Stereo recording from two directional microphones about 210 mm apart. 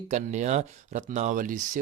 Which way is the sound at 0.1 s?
35° right (ahead or behind).